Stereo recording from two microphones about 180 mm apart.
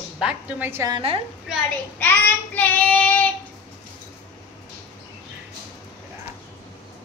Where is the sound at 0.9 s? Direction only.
30° right (ahead or behind).